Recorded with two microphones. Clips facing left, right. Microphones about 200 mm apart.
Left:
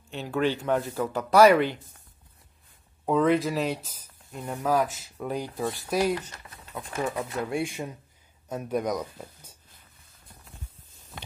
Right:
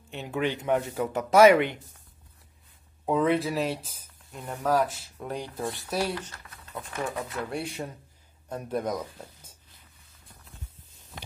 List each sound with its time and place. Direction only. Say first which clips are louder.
0.1 s speech: left 3 dB; 20° right (ahead or behind)
3.1 s speech: left 2 dB; centre (ahead or behind)
4.5 s speech: even; 5° left (ahead or behind)
6.9 s speech: left 3 dB; 25° left (ahead or behind)
7.5 s speech: left 3 dB; 10° left (ahead or behind)